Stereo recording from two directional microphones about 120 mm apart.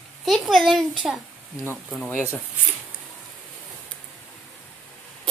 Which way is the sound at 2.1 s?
20° left (ahead or behind).